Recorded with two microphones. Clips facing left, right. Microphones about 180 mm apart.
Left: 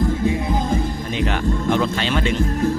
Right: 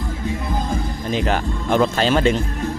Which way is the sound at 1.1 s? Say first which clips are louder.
Right 1 dB; 40° right (ahead or behind).